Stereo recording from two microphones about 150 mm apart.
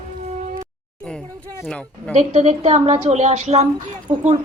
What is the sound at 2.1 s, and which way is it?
A woman's voice, 50° right (ahead or behind).